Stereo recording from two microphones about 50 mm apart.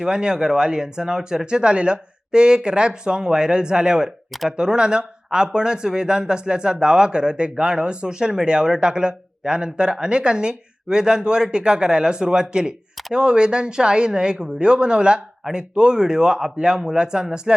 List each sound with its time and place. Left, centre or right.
0.0 s speech: centre